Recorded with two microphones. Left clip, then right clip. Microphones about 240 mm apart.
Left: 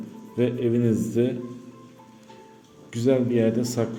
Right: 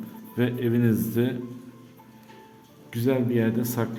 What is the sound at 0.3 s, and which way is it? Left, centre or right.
A man's voice, centre.